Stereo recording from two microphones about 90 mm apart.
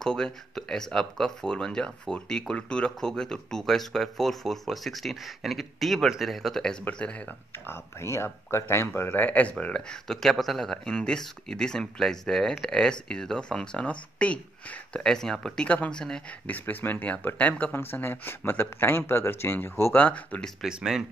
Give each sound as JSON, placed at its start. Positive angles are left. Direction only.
{"t": 0.0, "sound": "speech", "side_deg": 5}
{"t": 7.6, "sound": "speech", "side_deg": 30}
{"t": 16.5, "sound": "speech", "side_deg": 20}
{"t": 20.6, "sound": "speech", "side_deg": -5}